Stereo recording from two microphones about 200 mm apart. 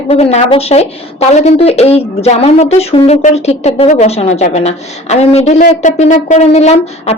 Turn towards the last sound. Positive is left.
turn(degrees=30)  # may be behind; listen again after turning